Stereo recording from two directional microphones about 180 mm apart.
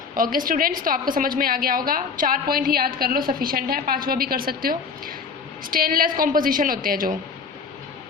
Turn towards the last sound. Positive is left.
turn(degrees=-50)  # may be behind; listen again after turning